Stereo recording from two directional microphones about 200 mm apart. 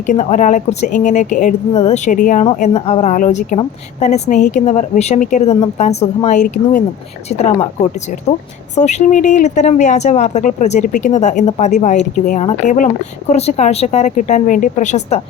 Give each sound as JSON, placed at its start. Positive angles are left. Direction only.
{"t": 0.0, "sound": "speech", "side_deg": 40}